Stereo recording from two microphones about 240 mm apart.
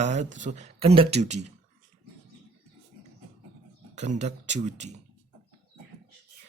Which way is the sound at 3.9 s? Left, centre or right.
Right.